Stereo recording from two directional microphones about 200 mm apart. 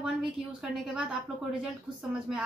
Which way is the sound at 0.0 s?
5° right (ahead or behind).